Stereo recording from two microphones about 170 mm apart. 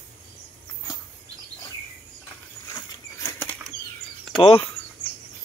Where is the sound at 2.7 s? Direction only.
15° left (ahead or behind).